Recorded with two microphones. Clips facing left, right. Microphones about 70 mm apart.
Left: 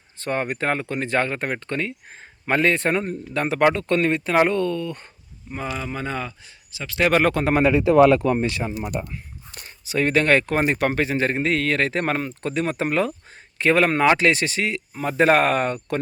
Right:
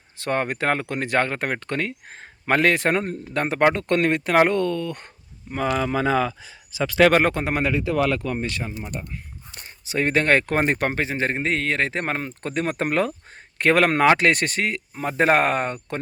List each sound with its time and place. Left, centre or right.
0.3 s speech: right
3.0 s speech: right
3.8 s speech: right
7.1 s speech: right
7.7 s speech: left
9.6 s speech: right
10.9 s speech: right
12.3 s speech: right
13.6 s speech: right